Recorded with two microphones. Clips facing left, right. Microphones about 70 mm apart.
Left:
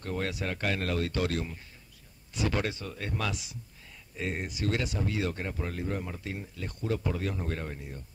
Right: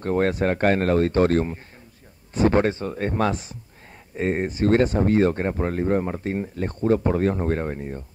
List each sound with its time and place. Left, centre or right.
0.0 s speech: right